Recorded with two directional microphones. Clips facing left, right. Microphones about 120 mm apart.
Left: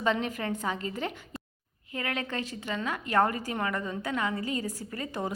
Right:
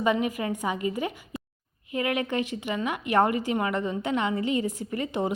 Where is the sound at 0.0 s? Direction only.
10° right (ahead or behind).